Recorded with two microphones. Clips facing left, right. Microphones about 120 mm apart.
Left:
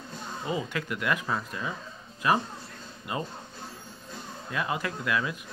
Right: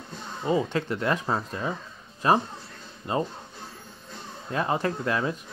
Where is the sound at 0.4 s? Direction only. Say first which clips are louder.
Right 7 dB; 30° right (ahead or behind).